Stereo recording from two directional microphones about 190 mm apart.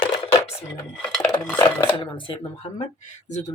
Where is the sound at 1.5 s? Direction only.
25° left (ahead or behind).